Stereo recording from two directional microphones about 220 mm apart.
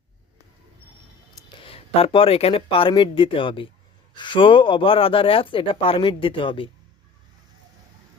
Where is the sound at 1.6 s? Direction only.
25° left (ahead or behind).